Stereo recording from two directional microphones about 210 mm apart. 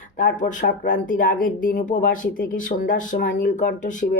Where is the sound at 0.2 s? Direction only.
40° left (ahead or behind).